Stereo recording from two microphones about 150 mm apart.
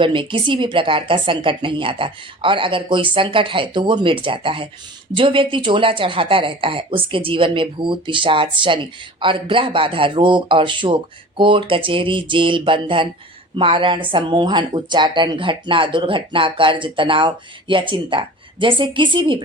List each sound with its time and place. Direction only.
0.0 s speech: 35° right (ahead or behind)